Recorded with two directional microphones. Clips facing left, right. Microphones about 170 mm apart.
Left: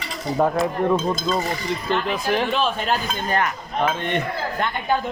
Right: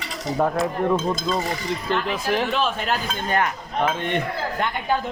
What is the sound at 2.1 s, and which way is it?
Speech, 5° right (ahead or behind).